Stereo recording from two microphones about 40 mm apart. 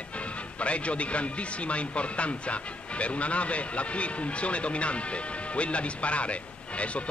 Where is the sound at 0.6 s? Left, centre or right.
Left.